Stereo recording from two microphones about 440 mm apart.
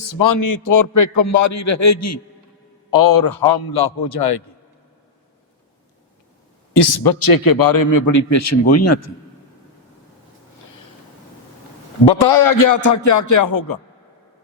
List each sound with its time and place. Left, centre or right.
0.0 s a man's voice: left
2.9 s a man's voice: left
6.7 s a man's voice: left
12.0 s a man's voice: left